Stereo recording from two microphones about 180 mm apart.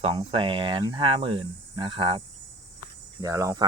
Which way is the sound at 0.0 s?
30° right (ahead or behind).